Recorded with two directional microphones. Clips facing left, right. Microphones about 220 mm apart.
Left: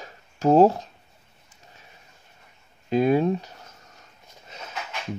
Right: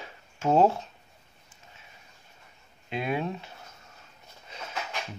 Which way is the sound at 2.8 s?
40° left (ahead or behind).